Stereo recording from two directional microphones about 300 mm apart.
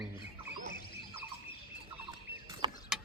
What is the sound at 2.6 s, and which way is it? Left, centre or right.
Vehicle, centre.